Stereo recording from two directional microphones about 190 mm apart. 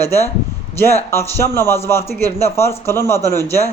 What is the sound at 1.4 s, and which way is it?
A man's voice, 15° left (ahead or behind).